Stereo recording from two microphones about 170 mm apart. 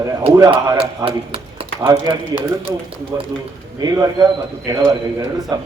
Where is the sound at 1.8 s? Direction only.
20° right (ahead or behind).